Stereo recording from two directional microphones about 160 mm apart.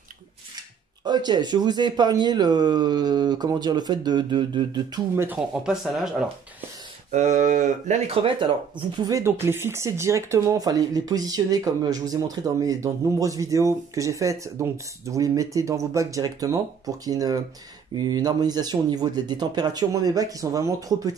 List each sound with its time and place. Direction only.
1.0 s speech: 25° right (ahead or behind)
5.1 s speech: 15° right (ahead or behind)
5.5 s speech: 5° right (ahead or behind)
7.1 s speech: 50° right (ahead or behind)
8.9 s speech: 20° right (ahead or behind)